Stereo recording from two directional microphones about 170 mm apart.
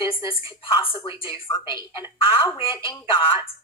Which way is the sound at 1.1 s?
30° left (ahead or behind).